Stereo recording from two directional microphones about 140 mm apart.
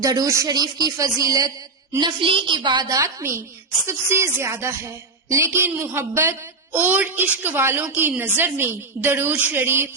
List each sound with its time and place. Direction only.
0.0 s a woman's voice: 25° right (ahead or behind)